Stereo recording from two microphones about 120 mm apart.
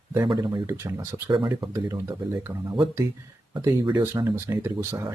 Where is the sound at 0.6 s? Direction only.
25° right (ahead or behind).